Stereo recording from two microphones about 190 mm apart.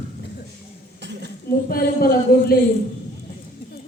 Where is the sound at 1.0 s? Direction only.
65° right (ahead or behind).